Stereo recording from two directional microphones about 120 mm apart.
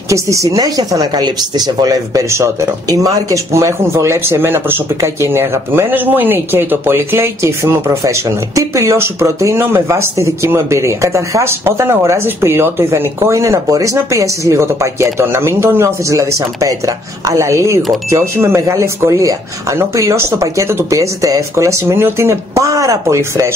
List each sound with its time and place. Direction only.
0.1 s a woman's voice: 25° right (ahead or behind)